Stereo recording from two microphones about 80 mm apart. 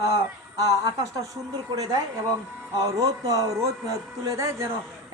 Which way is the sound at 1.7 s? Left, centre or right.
Right.